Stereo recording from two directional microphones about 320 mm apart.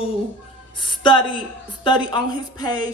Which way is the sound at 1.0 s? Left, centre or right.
Centre.